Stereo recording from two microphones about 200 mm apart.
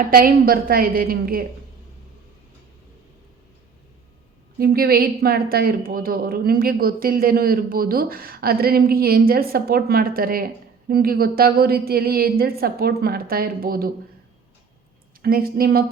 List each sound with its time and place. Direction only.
0.1 s a woman's voice: 45° right (ahead or behind)
4.5 s a woman's voice: 50° right (ahead or behind)
15.2 s a woman's voice: 45° right (ahead or behind)